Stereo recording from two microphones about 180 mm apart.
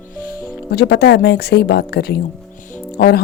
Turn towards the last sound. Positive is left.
turn(degrees=60)  # may be behind; listen again after turning